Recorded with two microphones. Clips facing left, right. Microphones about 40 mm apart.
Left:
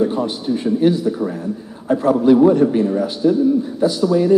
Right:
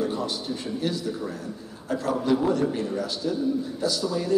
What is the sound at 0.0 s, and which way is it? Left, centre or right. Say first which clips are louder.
A man's voice: left 9 dB; left.